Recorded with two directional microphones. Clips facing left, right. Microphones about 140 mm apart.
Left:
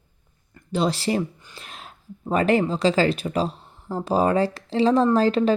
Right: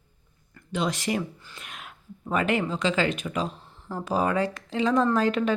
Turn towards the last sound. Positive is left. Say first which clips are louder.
# left 4 dB
turn(degrees=30)  # may be behind; listen again after turning